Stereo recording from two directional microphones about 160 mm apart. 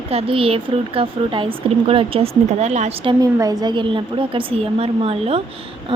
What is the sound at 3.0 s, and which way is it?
Speech, 20° right (ahead or behind).